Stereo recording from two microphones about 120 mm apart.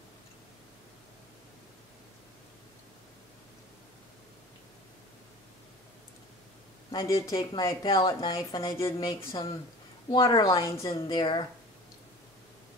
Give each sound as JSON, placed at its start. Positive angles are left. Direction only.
{"t": 6.9, "sound": "speech", "side_deg": 40}